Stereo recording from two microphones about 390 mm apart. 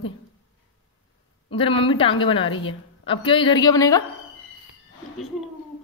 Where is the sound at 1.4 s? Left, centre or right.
Centre.